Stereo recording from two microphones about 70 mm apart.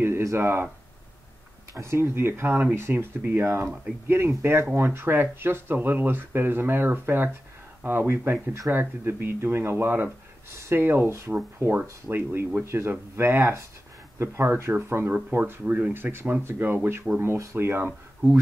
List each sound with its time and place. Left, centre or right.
0.0 s speech: right
1.7 s speech: right
11.1 s speech: right
11.6 s speech: right
15.6 s speech: right
15.9 s speech: right
17.2 s speech: right